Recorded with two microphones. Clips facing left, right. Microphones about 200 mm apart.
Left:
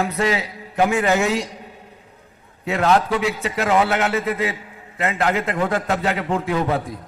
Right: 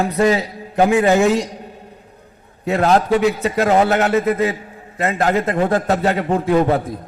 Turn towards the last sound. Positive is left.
turn(degrees=-40)  # may be behind; listen again after turning